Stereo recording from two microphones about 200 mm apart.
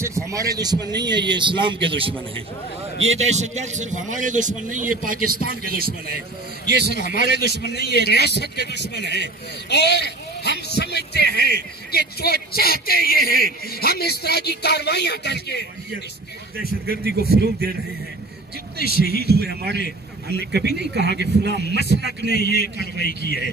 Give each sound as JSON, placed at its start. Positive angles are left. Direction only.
{"t": 0.0, "sound": "a man's voice", "side_deg": -15}
{"t": 7.0, "sound": "speech", "side_deg": 45}
{"t": 16.5, "sound": "speech", "side_deg": -50}
{"t": 19.0, "sound": "a man's voice", "side_deg": -55}
{"t": 22.4, "sound": "speech", "side_deg": 50}
{"t": 23.2, "sound": "a man's voice", "side_deg": -60}